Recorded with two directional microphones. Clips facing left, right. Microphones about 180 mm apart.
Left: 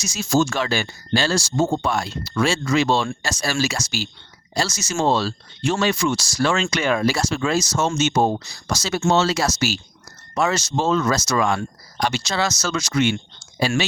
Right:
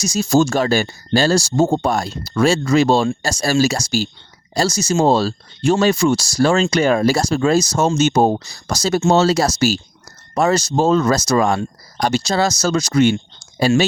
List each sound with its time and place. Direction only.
0.0 s speech: 35° right (ahead or behind)